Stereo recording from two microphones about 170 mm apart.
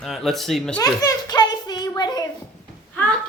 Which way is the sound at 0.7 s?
20° left (ahead or behind).